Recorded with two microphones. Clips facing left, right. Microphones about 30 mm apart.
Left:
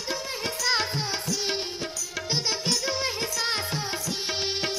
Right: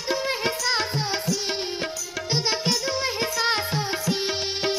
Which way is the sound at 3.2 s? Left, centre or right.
Centre.